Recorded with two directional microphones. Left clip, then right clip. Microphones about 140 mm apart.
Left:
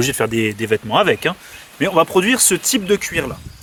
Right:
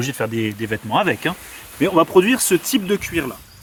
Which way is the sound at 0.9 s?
90° left.